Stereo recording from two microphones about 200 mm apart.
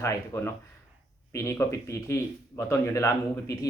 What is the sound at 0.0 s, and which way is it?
Speech, 15° left (ahead or behind).